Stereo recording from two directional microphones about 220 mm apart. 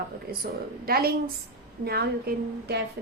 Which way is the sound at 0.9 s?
45° right (ahead or behind).